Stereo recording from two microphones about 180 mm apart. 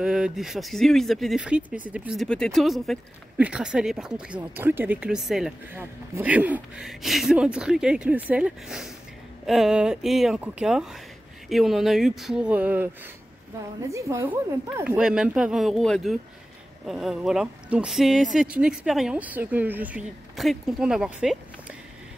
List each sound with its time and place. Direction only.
0.0 s a woman's voice: 5° right (ahead or behind)
14.9 s speech: 5° right (ahead or behind)